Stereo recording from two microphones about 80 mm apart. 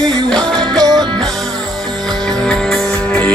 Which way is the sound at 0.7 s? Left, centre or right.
Right.